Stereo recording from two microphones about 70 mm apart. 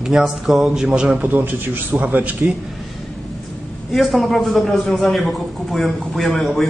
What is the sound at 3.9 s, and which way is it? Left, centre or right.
A man's voice, centre.